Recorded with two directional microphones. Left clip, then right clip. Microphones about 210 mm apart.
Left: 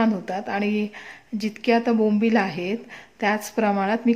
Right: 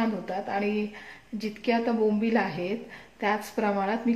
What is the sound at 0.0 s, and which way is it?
A woman's voice, 45° left (ahead or behind).